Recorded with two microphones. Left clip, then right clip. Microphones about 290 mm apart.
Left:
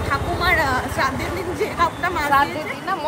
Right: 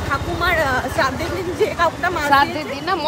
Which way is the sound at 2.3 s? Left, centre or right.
Right.